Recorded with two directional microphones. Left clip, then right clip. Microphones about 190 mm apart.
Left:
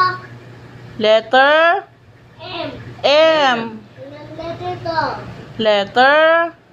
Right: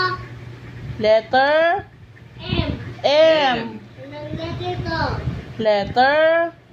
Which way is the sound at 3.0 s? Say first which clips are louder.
Left 2 dB; 15° left (ahead or behind).